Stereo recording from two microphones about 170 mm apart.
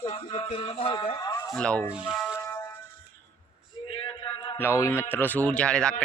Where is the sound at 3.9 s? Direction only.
30° left (ahead or behind).